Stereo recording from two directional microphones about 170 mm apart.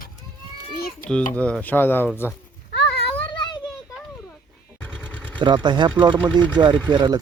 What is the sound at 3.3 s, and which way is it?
Children playing, 25° left (ahead or behind).